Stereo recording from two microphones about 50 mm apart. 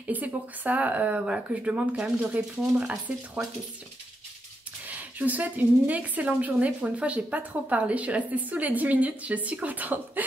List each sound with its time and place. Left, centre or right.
0.0 s a woman's voice: right
3.1 s speech: centre
4.8 s a woman's voice: right